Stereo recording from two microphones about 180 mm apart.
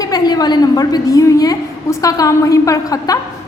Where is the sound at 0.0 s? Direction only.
20° left (ahead or behind).